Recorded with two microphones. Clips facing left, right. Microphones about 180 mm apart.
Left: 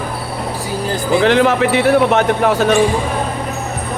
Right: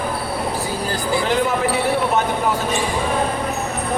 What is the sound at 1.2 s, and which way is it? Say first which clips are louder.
Speech: left 8 dB; 80° left.